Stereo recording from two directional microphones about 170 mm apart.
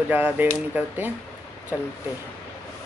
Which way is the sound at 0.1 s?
10° right (ahead or behind).